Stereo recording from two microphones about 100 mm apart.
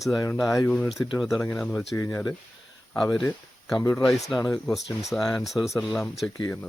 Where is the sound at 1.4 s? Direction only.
10° left (ahead or behind).